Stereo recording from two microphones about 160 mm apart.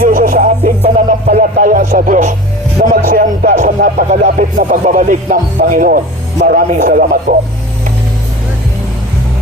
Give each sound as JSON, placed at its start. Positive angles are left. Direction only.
{"t": 0.0, "sound": "music", "side_deg": -55}
{"t": 0.6, "sound": "music", "side_deg": -45}
{"t": 1.5, "sound": "a man's voice", "side_deg": -60}